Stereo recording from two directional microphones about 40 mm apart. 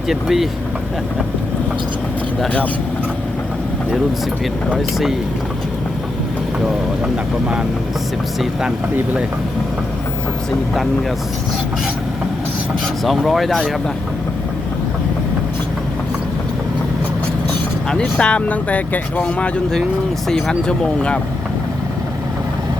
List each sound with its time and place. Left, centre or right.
0.1 s speech: centre
7.0 s speech: right
13.1 s speech: centre
18.2 s speech: left
18.4 s speech: left
20.2 s speech: centre
20.7 s speech: left